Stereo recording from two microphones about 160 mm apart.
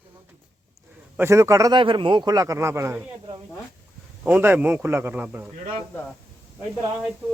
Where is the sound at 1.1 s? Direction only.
15° right (ahead or behind).